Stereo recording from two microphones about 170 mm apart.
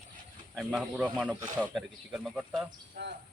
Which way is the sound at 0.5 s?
Centre (ahead or behind).